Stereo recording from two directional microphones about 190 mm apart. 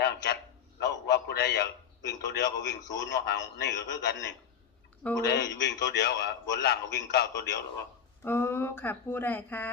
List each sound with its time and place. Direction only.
0.8 s a sound: 60° left (ahead or behind)
2.9 s a man's voice: 65° left (ahead or behind)
8.2 s speech: 10° left (ahead or behind)